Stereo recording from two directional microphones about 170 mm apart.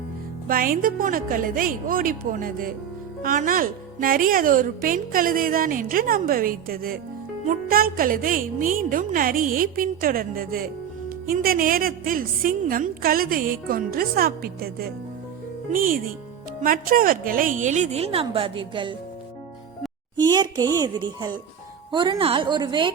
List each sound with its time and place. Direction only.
0.4 s a woman's voice: 55° right (ahead or behind); by 18.9 s 30° right (ahead or behind)
20.1 s a child's voice: 25° right (ahead or behind)